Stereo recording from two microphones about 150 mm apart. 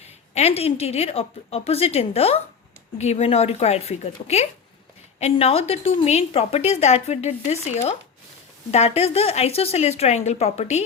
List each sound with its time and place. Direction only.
0.0 s a woman's voice: 45° left (ahead or behind)